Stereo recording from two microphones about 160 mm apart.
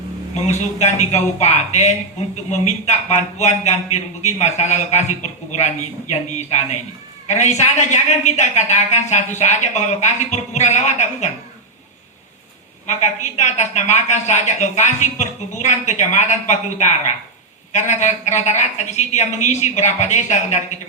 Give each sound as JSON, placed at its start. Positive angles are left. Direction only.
{"t": 0.4, "sound": "a man's voice", "side_deg": 45}
{"t": 12.9, "sound": "a man's voice", "side_deg": 45}